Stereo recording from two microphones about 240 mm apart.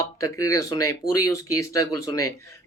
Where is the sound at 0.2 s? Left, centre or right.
Centre.